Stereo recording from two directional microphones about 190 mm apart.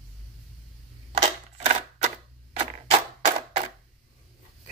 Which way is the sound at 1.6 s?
35° right (ahead or behind).